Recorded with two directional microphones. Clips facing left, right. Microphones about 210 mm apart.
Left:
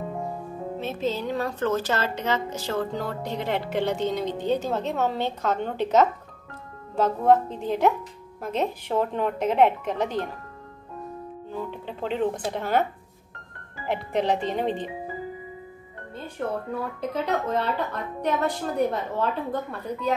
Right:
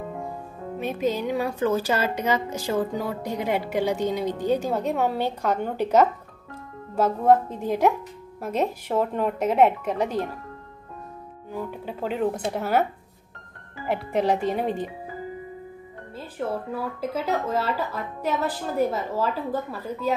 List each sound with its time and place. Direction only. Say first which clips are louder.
0.7 s speech: right 3 dB; 15° right (ahead or behind)
11.5 s speech: right 2 dB; 10° right (ahead or behind)
16.2 s speech: even; 5° right (ahead or behind)